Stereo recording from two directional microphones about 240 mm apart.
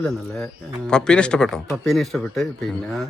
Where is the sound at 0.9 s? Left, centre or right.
Centre.